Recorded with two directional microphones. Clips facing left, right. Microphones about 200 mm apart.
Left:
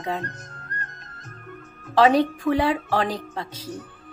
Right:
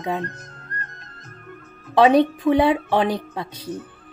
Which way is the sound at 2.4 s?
20° right (ahead or behind).